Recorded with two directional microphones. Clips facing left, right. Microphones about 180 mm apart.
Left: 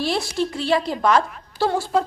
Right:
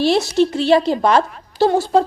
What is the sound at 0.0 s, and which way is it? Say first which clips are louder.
A woman's voice: right 8 dB; 25° right (ahead or behind).